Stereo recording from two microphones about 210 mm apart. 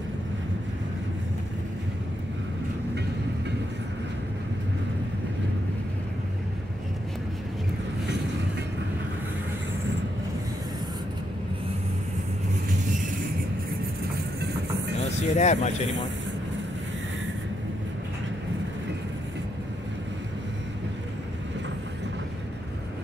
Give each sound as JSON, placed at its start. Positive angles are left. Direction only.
{"t": 15.0, "sound": "vehicle", "side_deg": 35}